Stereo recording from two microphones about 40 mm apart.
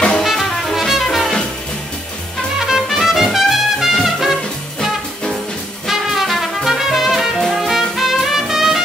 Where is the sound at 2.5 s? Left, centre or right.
Centre.